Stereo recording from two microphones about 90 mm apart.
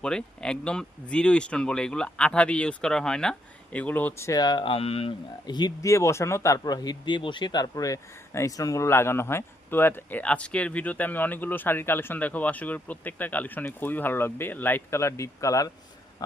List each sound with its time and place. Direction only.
0.0 s speech: 10° left (ahead or behind)
4.2 s speech: 40° left (ahead or behind)
4.6 s speech: 90° left
5.5 s speech: 55° left (ahead or behind)
5.8 s speech: 35° left (ahead or behind)
6.7 s speech: 55° left (ahead or behind); by 15.7 s 40° left (ahead or behind)